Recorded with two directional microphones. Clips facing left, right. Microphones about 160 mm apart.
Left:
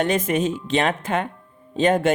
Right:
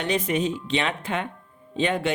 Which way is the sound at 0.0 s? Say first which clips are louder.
Left 4 dB; 45° left (ahead or behind).